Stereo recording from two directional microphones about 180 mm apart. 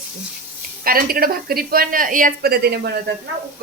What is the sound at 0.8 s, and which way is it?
Speech, 55° right (ahead or behind).